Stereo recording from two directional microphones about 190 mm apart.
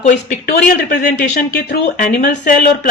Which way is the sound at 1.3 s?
50° left (ahead or behind).